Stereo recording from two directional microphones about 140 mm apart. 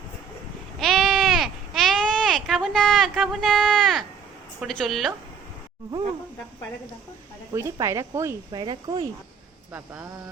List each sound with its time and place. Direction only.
0.8 s sheep: centre (ahead or behind)
4.6 s a woman's voice: centre (ahead or behind)
7.5 s speech: 20° right (ahead or behind)
8.6 s speech: 30° right (ahead or behind)
9.7 s speech: 10° right (ahead or behind)